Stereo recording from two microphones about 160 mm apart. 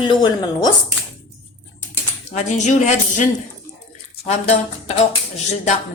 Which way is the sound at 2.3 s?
50° left (ahead or behind).